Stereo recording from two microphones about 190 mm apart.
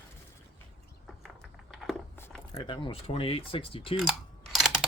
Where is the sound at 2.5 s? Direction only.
25° left (ahead or behind).